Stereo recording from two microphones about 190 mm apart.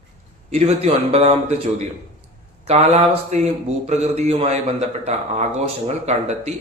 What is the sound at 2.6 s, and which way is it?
Speech, 35° right (ahead or behind).